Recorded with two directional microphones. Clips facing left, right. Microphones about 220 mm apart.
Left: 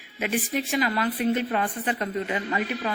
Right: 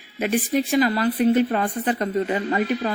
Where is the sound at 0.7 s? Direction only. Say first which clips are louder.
Right 5 dB; 35° right (ahead or behind).